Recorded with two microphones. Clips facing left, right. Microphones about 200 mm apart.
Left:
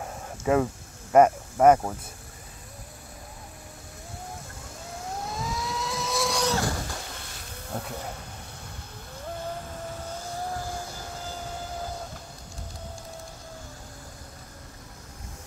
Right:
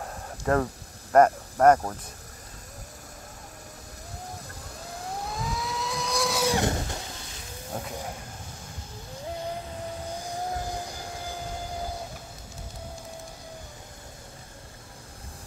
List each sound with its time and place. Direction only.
0.5 s speech: 5° left (ahead or behind)
5.2 s vehicle: centre (ahead or behind)
6.5 s a sound: 20° right (ahead or behind)
7.7 s speech: 10° right (ahead or behind)
10.2 s vehicle: 15° right (ahead or behind)